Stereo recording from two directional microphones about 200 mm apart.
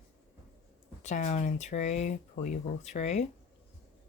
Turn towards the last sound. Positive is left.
turn(degrees=35)  # may be behind; listen again after turning